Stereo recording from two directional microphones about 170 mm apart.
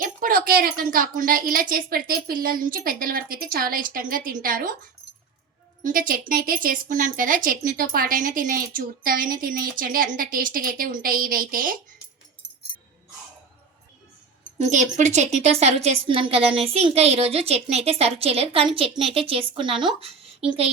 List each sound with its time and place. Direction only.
0.0 s a woman's voice: 55° right (ahead or behind)
5.8 s a woman's voice: 55° right (ahead or behind)
14.6 s a woman's voice: 45° right (ahead or behind)